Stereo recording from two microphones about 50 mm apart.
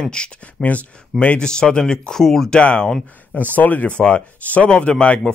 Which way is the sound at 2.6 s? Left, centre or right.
Left.